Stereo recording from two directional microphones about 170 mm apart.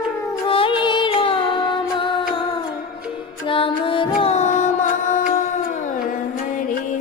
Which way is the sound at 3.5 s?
30° left (ahead or behind).